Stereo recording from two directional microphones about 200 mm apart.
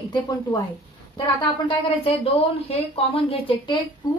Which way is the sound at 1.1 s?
25° left (ahead or behind).